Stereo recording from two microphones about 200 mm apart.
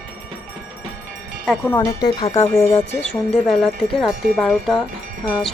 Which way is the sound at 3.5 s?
Centre (ahead or behind).